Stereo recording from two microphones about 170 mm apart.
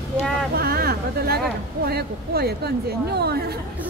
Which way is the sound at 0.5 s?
65° right (ahead or behind).